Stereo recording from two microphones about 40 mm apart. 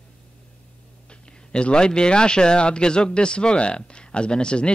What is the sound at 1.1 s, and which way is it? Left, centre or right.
Speech, left.